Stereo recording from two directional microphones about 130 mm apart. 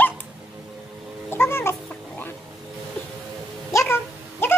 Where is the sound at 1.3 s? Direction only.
20° left (ahead or behind).